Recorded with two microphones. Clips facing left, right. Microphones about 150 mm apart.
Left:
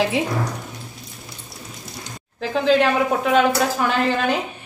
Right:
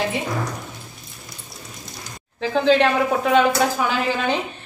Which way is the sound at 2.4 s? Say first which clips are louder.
Right 1 dB; centre (ahead or behind).